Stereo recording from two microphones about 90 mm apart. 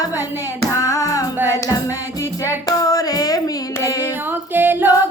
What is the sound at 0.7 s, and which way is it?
Music, 40° left (ahead or behind).